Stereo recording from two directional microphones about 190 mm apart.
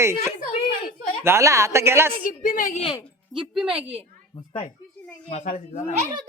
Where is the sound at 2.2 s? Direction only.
45° left (ahead or behind).